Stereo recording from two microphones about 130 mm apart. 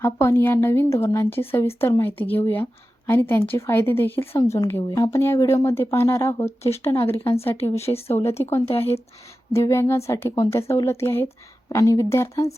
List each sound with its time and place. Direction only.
0.0 s a woman's voice: 20° left (ahead or behind)
7.8 s speech: 50° left (ahead or behind)
8.4 s a woman's voice: 20° left (ahead or behind)